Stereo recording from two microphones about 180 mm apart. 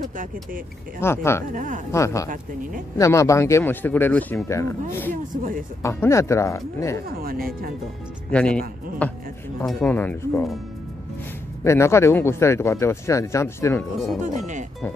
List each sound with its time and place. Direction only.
1.0 s speech: 15° left (ahead or behind)
1.5 s speech: 45° right (ahead or behind)
1.9 s speech: 15° left (ahead or behind)
5.3 s speech: 50° right (ahead or behind)
5.8 s speech: 15° left (ahead or behind)
7.1 s speech: 55° right (ahead or behind)
8.3 s speech: 5° left (ahead or behind)
11.6 s speech: 15° left (ahead or behind)
14.2 s speech: 40° right (ahead or behind)